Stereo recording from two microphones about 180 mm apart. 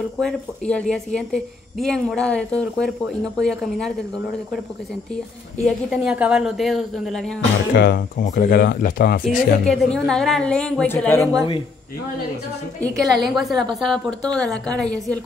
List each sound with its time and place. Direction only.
0.2 s a woman's voice: 5° left (ahead or behind)
5.9 s a woman's voice: 5° right (ahead or behind)
7.7 s speech: 60° left (ahead or behind)
9.7 s a woman's voice: 5° left (ahead or behind)
12.8 s a woman's voice: centre (ahead or behind)